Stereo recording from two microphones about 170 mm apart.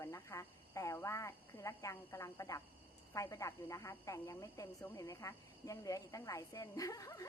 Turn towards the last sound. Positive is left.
turn(degrees=20)  # may be behind; listen again after turning